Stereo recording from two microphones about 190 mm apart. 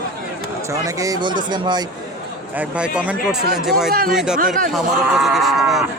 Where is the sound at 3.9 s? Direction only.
50° right (ahead or behind).